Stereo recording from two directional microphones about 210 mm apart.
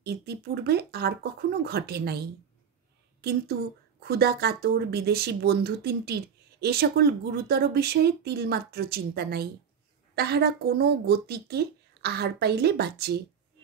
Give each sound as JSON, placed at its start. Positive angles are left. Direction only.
{"t": 0.0, "sound": "a woman's voice", "side_deg": -50}